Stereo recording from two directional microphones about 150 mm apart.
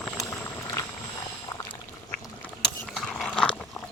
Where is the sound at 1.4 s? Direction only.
25° left (ahead or behind).